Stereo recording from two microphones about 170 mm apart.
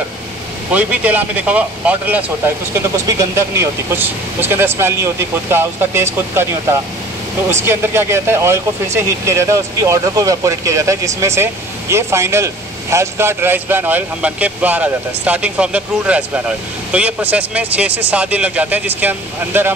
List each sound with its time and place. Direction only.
0.7 s speech: 10° right (ahead or behind)
7.4 s speech: 15° right (ahead or behind)